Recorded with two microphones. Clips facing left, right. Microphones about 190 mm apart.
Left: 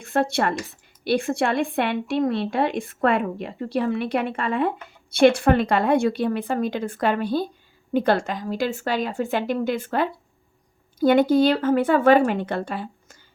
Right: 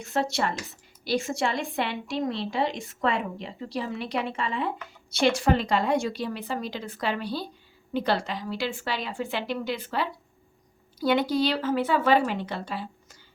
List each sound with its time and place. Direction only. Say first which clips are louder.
0.0 s speech: left 5 dB; 55° left (ahead or behind)